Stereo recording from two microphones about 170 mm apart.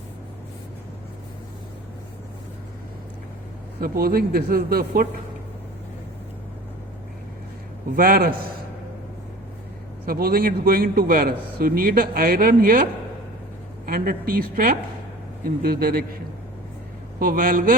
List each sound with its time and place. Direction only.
3.8 s a man's voice: 60° right (ahead or behind)
7.9 s a man's voice: 60° right (ahead or behind)
10.1 s a man's voice: 60° right (ahead or behind)
17.2 s a man's voice: 55° right (ahead or behind)